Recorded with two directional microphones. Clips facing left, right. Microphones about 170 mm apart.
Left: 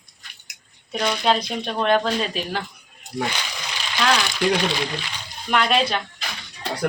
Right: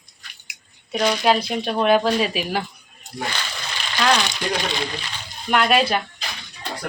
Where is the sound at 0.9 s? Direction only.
10° right (ahead or behind).